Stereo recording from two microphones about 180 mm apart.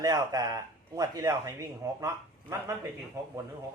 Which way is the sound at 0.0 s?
20° right (ahead or behind).